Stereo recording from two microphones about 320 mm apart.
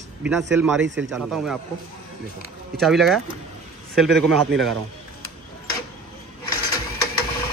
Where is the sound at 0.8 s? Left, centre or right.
Right.